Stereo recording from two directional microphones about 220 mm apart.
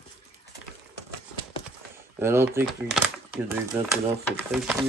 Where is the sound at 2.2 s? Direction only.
10° right (ahead or behind).